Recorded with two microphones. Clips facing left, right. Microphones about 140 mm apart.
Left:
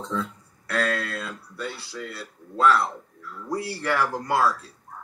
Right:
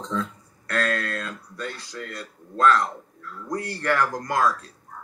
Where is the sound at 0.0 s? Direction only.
10° left (ahead or behind).